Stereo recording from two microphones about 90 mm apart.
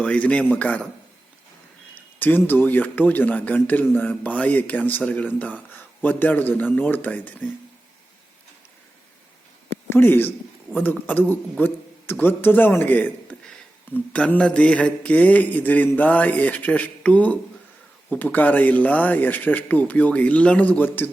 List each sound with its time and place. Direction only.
0.0 s mantra: 15° left (ahead or behind)
2.1 s speech: 20° left (ahead or behind)
9.9 s a man's voice: 25° left (ahead or behind)
13.9 s mantra: 15° left (ahead or behind)
18.1 s speech: 20° left (ahead or behind)